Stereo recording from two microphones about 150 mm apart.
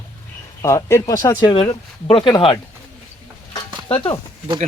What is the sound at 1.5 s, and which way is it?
Speech, 35° left (ahead or behind).